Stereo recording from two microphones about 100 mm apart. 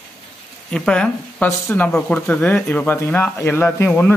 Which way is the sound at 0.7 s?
5° left (ahead or behind).